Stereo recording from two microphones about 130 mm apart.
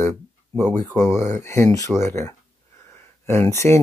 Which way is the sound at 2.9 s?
20° left (ahead or behind).